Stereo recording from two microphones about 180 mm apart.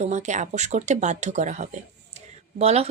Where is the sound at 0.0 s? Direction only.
40° right (ahead or behind).